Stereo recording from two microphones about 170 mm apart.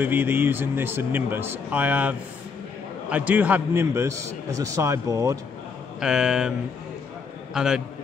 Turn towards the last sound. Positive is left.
turn(degrees=-5)  # may be behind; listen again after turning